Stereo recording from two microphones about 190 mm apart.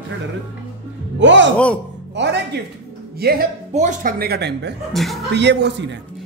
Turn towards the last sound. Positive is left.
turn(degrees=-65)  # may be behind; listen again after turning